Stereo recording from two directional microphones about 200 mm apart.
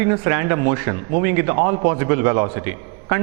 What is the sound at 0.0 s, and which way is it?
A man's voice, 15° right (ahead or behind).